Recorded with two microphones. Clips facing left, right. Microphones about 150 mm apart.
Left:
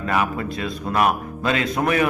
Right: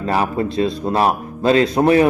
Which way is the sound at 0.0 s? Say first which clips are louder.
Right 4 dB; 30° right (ahead or behind).